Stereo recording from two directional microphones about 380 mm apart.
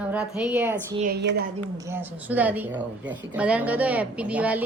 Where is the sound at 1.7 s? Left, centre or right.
Centre.